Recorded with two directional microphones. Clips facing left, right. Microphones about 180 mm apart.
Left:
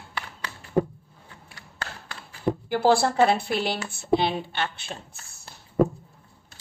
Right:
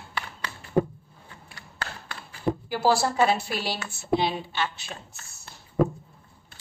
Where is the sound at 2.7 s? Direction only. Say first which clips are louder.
Left 3 dB; 55° left (ahead or behind).